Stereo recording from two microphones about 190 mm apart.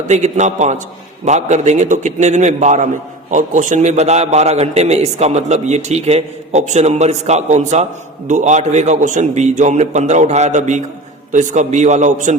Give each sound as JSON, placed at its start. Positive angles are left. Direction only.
{"t": 0.1, "sound": "a man's voice", "side_deg": -40}